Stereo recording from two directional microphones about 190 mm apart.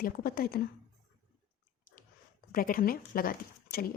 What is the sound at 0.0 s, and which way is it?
Speech, 50° left (ahead or behind).